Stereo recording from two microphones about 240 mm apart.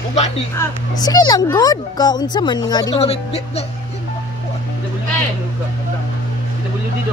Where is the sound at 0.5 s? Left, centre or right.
Centre.